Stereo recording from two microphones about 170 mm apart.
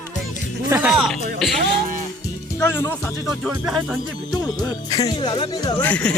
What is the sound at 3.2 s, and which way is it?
Speech, centre (ahead or behind).